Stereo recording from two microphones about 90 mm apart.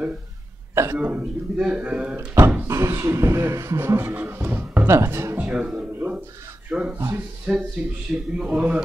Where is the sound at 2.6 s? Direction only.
35° right (ahead or behind).